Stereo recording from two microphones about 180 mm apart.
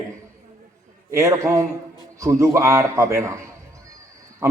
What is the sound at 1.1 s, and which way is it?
A man's voice, 15° right (ahead or behind).